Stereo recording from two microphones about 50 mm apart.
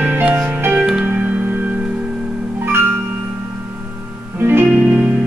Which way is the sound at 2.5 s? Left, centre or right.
Right.